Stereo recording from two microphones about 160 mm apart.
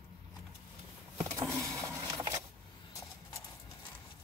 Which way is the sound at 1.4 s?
20° right (ahead or behind).